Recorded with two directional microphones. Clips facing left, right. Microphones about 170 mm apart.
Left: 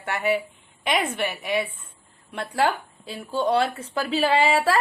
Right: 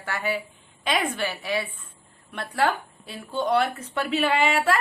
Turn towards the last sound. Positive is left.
turn(degrees=35)  # may be behind; listen again after turning